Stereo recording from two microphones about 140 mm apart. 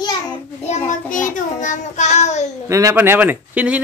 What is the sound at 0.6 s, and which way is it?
Child singing, 60° left (ahead or behind).